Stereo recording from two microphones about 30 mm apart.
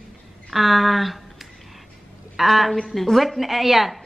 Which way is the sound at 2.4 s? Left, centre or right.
Centre.